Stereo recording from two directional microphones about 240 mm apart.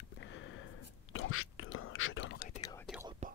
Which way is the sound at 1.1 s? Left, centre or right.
Left.